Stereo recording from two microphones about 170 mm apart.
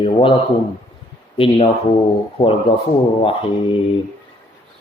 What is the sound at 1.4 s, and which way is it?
Speech, 35° left (ahead or behind).